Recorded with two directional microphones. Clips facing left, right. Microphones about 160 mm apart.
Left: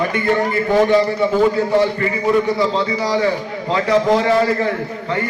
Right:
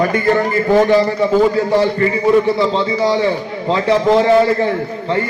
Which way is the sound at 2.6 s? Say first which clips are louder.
Right 3 dB; 25° right (ahead or behind).